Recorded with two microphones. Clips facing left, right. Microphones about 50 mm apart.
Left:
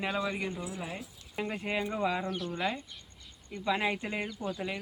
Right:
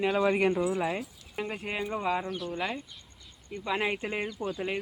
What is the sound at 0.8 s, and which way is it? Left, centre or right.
Speech, right.